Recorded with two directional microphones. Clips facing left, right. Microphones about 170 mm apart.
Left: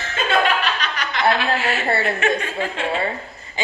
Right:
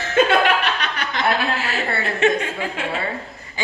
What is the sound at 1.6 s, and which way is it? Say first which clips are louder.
Speech: left 3 dB; 30° left (ahead or behind).